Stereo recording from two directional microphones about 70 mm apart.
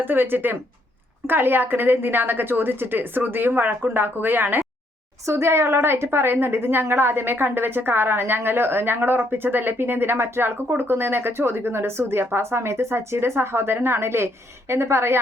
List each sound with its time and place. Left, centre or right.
0.0 s a woman's voice: right
5.2 s a woman's voice: right